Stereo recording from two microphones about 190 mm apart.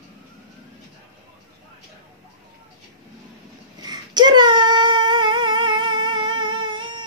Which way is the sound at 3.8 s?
20° right (ahead or behind).